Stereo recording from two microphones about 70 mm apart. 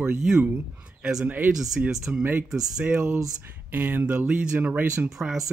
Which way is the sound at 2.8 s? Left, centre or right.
Right.